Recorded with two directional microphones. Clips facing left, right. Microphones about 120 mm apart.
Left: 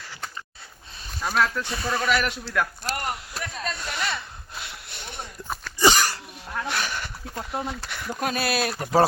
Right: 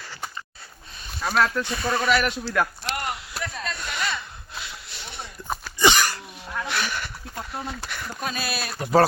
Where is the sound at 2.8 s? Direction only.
40° left (ahead or behind).